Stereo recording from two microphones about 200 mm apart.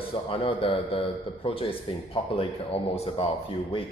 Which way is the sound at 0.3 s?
25° left (ahead or behind).